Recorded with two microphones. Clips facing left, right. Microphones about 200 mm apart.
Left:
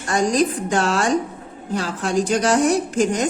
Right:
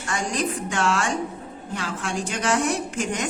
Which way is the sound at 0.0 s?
40° left (ahead or behind).